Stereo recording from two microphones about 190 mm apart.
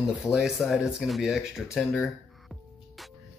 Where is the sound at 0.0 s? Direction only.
5° right (ahead or behind).